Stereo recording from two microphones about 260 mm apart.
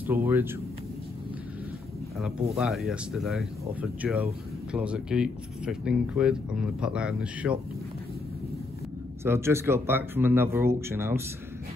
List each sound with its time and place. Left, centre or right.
0.0 s speech: centre
2.1 s speech: centre
9.2 s speech: centre